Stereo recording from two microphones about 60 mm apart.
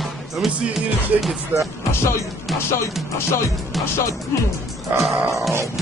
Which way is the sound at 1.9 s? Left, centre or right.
Left.